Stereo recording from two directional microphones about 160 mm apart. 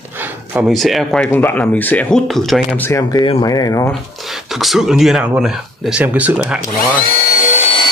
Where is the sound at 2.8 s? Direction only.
20° left (ahead or behind).